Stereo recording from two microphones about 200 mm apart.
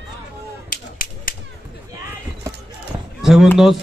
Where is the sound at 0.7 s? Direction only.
45° left (ahead or behind).